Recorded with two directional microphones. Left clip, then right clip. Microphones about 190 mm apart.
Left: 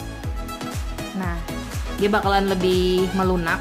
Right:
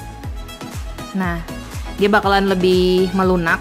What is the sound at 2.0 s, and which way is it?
Speech, 30° right (ahead or behind).